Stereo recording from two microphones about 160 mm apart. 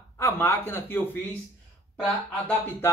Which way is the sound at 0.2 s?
15° left (ahead or behind).